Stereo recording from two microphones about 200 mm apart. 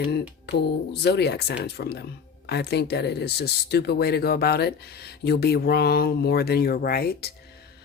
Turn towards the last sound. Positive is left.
turn(degrees=50)  # may be behind; listen again after turning